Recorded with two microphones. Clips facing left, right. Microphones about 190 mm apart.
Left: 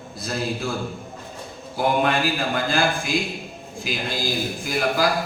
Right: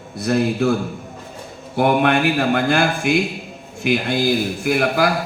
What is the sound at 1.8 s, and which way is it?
Mantra, 60° right (ahead or behind).